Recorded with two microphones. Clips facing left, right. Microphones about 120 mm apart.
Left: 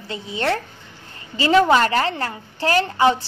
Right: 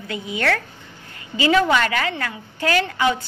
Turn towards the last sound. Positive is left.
turn(degrees=30)  # may be behind; listen again after turning